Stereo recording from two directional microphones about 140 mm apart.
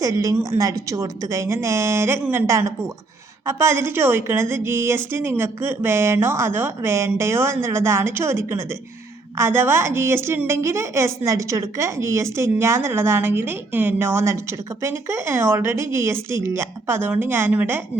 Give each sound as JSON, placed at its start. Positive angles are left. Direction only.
{"t": 0.0, "sound": "a woman's voice", "side_deg": -25}